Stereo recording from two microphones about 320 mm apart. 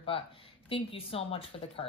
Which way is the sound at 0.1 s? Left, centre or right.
Centre.